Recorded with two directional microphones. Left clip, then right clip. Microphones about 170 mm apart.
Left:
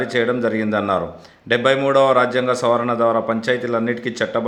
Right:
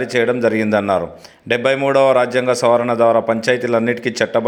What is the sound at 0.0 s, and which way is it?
A man's voice, 20° right (ahead or behind).